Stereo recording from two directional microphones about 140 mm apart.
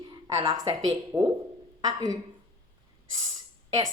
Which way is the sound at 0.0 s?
35° right (ahead or behind).